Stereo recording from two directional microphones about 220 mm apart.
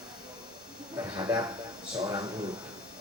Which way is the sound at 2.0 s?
20° right (ahead or behind).